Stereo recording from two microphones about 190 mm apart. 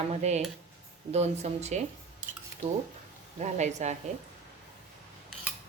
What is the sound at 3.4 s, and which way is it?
Speech, 40° right (ahead or behind).